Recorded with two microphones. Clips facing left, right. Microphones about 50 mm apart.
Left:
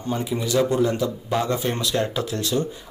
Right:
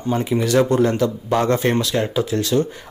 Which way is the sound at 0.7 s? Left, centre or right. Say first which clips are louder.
Right 4 dB; right.